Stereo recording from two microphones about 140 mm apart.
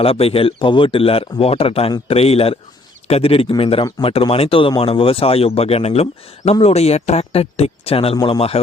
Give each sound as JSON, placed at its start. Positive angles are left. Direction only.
{"t": 0.0, "sound": "speech", "side_deg": 45}
{"t": 8.1, "sound": "speech", "side_deg": 30}
{"t": 8.4, "sound": "speech", "side_deg": 45}